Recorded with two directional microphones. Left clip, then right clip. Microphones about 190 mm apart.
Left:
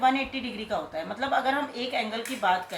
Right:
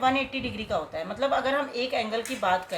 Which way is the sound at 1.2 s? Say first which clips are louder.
Right 1 dB; 40° right (ahead or behind).